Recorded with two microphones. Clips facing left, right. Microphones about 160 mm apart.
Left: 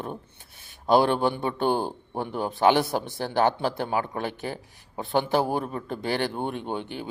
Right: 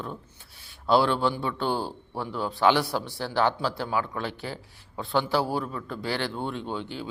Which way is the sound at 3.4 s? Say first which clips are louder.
Left 2 dB; 50° left (ahead or behind).